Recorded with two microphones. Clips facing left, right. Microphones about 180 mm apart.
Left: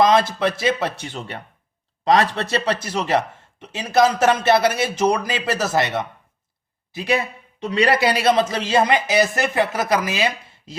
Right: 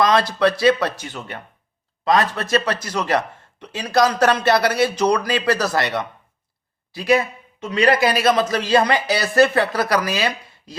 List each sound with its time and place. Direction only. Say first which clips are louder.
0.0 s speech: even; 25° left (ahead or behind)